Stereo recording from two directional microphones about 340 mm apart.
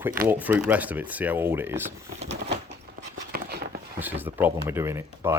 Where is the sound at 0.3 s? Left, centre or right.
Centre.